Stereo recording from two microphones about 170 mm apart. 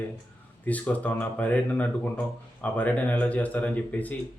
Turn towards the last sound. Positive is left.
turn(degrees=10)  # may be behind; listen again after turning